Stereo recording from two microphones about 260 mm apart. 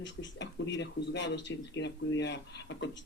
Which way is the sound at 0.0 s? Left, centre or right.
Left.